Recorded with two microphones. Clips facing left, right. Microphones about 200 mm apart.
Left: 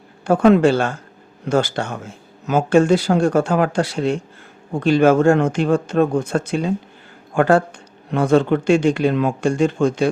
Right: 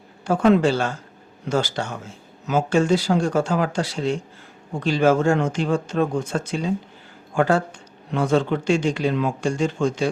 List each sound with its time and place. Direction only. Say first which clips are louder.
0.3 s speech: left 4 dB; 55° left (ahead or behind)